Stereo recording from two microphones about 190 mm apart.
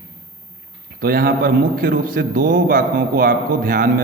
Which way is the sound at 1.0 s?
50° right (ahead or behind).